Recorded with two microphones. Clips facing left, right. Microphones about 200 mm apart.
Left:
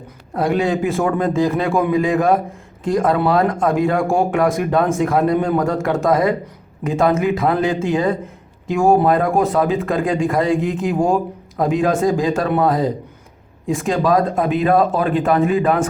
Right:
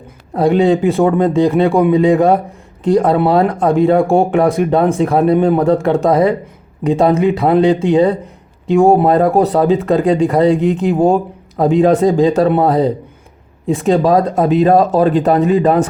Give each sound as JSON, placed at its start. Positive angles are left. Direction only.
{"t": 0.3, "sound": "a man's voice", "side_deg": -25}
{"t": 14.3, "sound": "speech", "side_deg": -40}